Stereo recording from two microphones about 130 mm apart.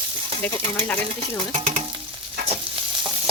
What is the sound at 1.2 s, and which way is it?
Speech, 50° right (ahead or behind).